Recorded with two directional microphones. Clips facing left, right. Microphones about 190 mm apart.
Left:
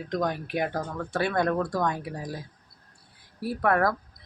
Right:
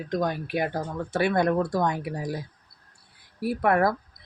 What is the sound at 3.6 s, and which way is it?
Speech, 15° right (ahead or behind).